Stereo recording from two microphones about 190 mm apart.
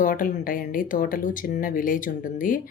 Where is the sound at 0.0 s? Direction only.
45° left (ahead or behind).